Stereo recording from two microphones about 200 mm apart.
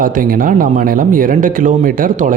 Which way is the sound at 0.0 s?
45° right (ahead or behind).